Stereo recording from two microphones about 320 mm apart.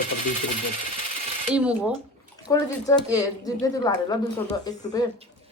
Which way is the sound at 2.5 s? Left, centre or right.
Centre.